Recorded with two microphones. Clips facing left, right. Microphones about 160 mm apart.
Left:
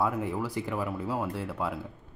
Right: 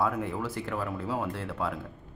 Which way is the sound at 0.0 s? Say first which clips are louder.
Even; 10° left (ahead or behind).